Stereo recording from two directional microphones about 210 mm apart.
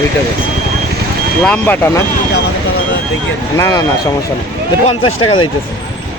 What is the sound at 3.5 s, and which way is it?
Speech, 15° left (ahead or behind).